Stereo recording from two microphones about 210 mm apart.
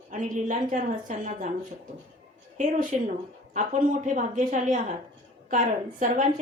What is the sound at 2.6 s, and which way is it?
A woman's voice, 40° right (ahead or behind).